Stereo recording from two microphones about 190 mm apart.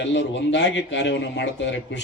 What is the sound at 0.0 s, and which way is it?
A man's voice, 75° left (ahead or behind).